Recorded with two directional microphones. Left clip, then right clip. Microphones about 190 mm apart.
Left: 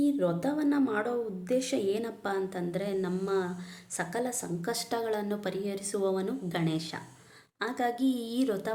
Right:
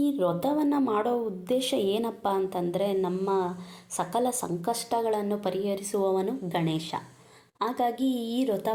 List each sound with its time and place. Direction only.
0.3 s speech: 15° right (ahead or behind)
4.7 s speech: 5° right (ahead or behind)